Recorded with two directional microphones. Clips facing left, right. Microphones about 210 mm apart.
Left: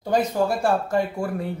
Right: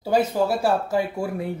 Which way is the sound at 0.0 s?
5° right (ahead or behind).